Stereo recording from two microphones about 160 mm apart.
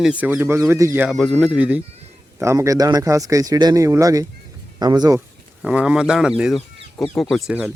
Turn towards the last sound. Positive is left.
turn(degrees=0)  # may be behind; listen again after turning